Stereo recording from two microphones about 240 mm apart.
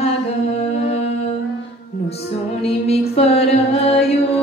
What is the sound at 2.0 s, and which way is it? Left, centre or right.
Music, left.